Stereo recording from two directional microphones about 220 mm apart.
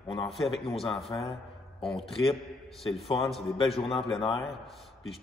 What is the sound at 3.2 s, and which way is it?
A man's voice, centre (ahead or behind).